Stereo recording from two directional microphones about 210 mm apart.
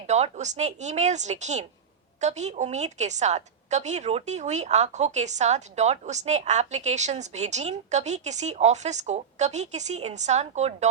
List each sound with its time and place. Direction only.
0.1 s a woman's voice: 35° right (ahead or behind)